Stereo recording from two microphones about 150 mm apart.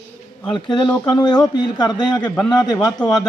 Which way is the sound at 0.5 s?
30° left (ahead or behind).